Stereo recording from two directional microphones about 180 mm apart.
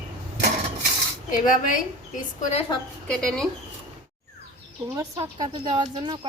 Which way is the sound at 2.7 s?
25° left (ahead or behind).